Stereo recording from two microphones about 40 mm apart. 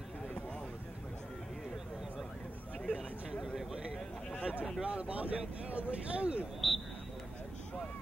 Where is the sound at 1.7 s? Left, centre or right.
Centre.